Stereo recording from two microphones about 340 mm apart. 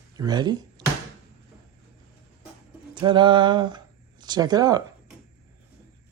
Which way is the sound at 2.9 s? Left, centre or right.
Centre.